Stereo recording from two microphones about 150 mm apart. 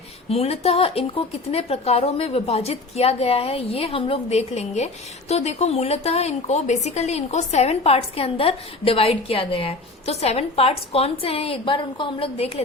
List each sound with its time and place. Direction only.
0.3 s a woman's voice: 45° left (ahead or behind)